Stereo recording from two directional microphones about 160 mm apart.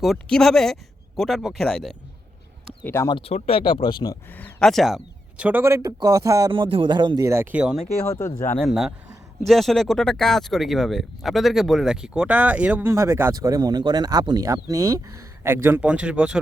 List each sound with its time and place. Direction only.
0.0 s speech: centre (ahead or behind)
2.8 s speech: 15° left (ahead or behind)
3.1 s speech: 35° left (ahead or behind)
4.3 s speech: 10° left (ahead or behind); by 6.5 s 20° right (ahead or behind)
6.5 s speech: 30° right (ahead or behind); by 7.9 s 5° right (ahead or behind)
8.0 s speech: 20° left (ahead or behind)
8.5 s speech: centre (ahead or behind)